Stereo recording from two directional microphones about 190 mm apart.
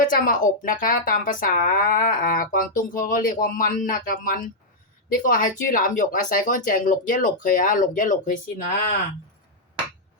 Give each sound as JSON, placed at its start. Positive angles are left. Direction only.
{"t": 0.0, "sound": "speech", "side_deg": 45}